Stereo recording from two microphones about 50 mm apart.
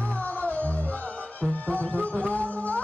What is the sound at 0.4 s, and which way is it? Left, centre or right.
Music, left.